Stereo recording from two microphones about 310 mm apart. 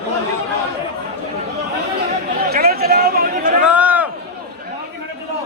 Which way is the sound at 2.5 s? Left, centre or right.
Right.